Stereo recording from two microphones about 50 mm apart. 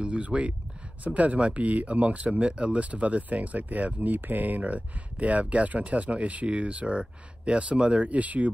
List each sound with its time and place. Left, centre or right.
0.0 s speech: right